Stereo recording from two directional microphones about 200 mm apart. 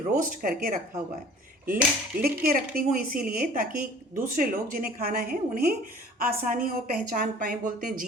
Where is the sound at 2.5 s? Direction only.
45° right (ahead or behind).